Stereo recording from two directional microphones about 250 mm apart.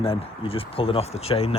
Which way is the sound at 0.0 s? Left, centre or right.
Left.